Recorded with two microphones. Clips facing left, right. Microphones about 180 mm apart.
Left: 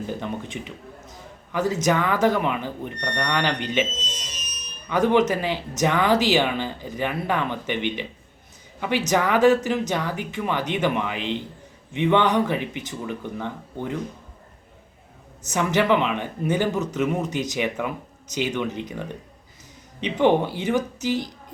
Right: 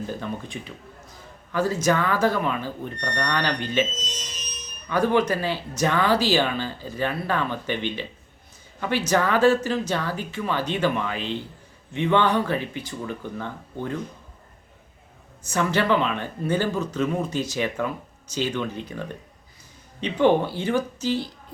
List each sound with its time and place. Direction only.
0.1 s speech: 20° left (ahead or behind)
4.9 s speech: 20° left (ahead or behind)
15.4 s speech: 15° left (ahead or behind)